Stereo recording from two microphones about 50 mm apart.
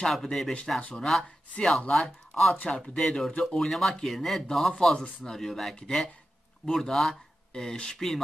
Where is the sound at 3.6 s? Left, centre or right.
Centre.